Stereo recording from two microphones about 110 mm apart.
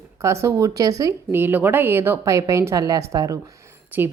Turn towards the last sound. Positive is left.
turn(degrees=-20)  # may be behind; listen again after turning